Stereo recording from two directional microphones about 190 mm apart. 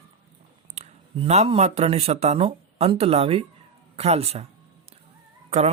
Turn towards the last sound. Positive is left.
turn(degrees=-35)  # may be behind; listen again after turning